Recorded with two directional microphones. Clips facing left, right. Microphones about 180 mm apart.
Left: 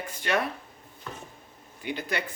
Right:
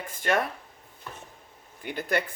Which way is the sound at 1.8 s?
50° right (ahead or behind).